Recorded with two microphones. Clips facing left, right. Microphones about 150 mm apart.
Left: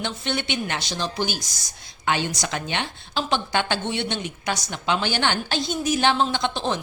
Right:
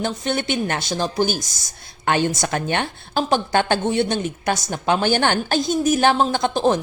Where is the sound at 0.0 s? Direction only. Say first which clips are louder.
Right 5 dB; 45° right (ahead or behind).